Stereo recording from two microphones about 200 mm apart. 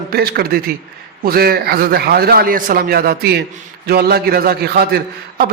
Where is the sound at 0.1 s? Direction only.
50° right (ahead or behind).